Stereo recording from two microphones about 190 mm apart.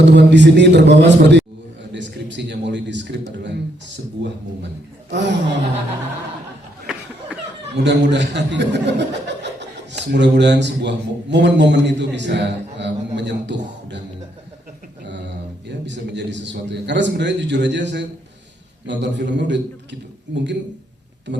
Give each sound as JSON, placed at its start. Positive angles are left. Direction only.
{"t": 0.0, "sound": "a man's voice", "side_deg": -65}
{"t": 5.1, "sound": "a man's voice", "side_deg": -70}
{"t": 7.9, "sound": "a man's voice", "side_deg": -65}
{"t": 15.9, "sound": "a man's voice", "side_deg": -65}